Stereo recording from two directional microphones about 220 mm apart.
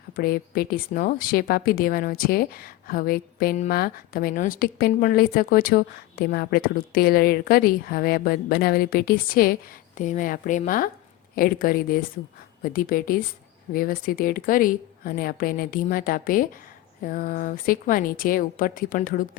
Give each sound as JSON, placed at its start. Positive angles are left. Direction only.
{"t": 0.2, "sound": "a woman's voice", "side_deg": 40}